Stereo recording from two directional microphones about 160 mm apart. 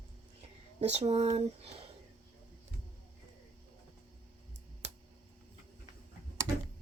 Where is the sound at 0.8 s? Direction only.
40° right (ahead or behind).